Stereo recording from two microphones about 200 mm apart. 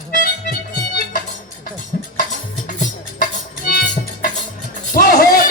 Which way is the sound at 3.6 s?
45° left (ahead or behind).